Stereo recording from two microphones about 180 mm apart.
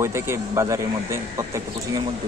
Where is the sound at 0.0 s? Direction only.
15° right (ahead or behind).